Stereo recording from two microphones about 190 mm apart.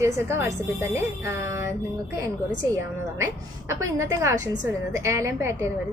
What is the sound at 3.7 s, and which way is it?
A woman's voice, 15° right (ahead or behind).